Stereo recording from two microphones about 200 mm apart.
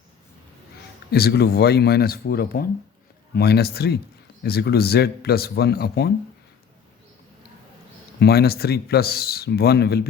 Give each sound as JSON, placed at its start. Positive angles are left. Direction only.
{"t": 1.1, "sound": "speech", "side_deg": 55}
{"t": 8.2, "sound": "speech", "side_deg": 50}